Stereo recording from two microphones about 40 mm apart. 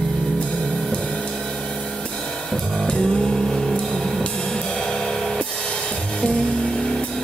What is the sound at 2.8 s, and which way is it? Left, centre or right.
Music, left.